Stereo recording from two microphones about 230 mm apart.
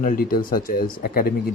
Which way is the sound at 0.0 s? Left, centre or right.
Left.